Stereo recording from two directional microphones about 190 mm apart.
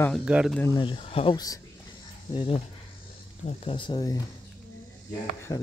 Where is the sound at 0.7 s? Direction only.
25° left (ahead or behind).